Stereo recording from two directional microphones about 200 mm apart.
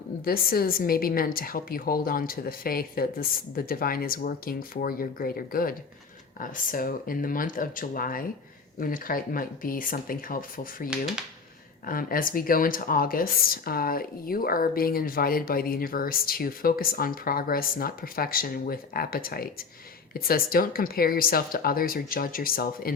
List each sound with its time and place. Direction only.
0.3 s speech: 45° left (ahead or behind)
11.9 s speech: 45° left (ahead or behind)